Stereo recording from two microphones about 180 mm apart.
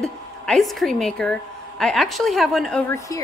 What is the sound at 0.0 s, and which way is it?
A woman's voice, centre (ahead or behind).